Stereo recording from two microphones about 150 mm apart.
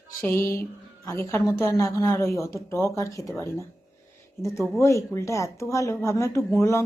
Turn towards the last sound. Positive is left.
turn(degrees=20)  # may be behind; listen again after turning